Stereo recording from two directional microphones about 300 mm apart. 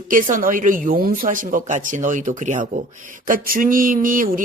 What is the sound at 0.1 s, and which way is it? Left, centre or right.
Speech, right.